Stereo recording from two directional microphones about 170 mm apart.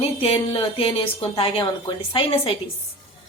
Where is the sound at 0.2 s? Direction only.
35° left (ahead or behind).